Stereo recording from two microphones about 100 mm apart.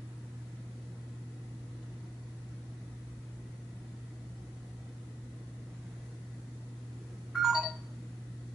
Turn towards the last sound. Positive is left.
turn(degrees=-5)  # may be behind; listen again after turning